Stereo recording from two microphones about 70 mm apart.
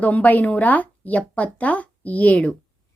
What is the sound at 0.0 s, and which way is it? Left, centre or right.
A woman's voice, left.